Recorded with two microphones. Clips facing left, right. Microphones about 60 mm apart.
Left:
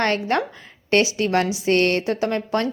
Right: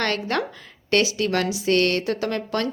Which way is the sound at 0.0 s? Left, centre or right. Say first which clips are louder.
Left 3 dB; left.